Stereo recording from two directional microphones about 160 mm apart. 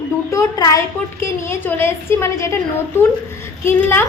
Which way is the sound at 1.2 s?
15° left (ahead or behind).